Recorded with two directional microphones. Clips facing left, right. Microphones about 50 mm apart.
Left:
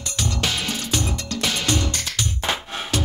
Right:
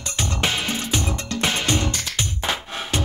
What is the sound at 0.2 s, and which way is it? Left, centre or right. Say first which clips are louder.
Music: right 1 dB; right.